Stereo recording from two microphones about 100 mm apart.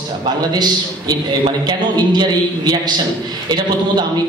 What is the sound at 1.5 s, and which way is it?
Speech, 45° right (ahead or behind).